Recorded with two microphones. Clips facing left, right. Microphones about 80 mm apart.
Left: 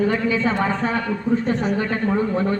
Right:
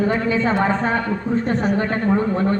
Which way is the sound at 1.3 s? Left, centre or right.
Right.